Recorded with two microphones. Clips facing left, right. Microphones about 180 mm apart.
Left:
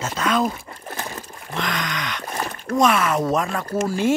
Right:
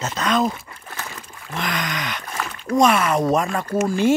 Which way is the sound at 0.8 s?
35° left (ahead or behind).